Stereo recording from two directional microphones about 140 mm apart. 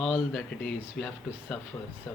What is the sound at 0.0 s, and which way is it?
Speech, 5° right (ahead or behind).